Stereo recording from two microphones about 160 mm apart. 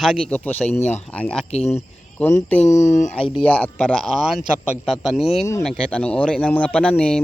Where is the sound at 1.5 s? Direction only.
40° left (ahead or behind).